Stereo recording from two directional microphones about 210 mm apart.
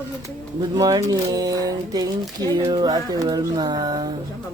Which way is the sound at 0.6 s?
20° right (ahead or behind).